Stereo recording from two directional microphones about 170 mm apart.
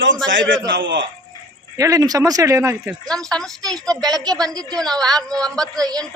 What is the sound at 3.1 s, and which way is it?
Speech, 5° left (ahead or behind).